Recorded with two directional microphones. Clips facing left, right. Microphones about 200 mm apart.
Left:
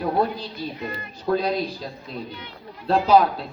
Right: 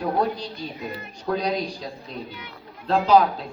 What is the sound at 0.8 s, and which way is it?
A child's voice, centre (ahead or behind).